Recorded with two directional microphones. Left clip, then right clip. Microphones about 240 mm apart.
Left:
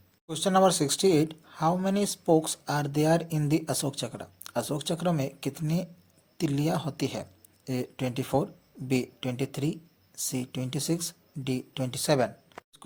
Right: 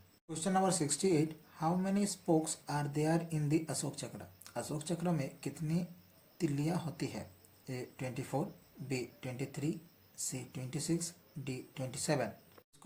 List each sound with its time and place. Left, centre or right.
0.3 s speech: left